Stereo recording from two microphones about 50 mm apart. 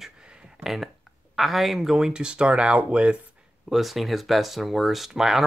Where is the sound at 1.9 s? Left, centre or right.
Centre.